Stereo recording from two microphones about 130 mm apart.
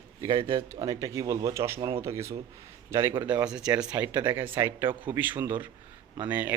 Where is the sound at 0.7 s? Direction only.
25° right (ahead or behind).